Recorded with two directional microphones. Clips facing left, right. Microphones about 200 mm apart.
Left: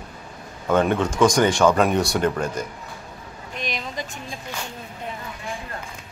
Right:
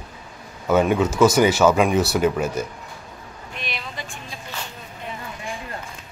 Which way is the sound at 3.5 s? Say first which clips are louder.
Left 4 dB; 40° left (ahead or behind).